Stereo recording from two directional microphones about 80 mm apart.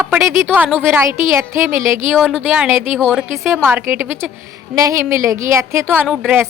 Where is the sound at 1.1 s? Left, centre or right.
Right.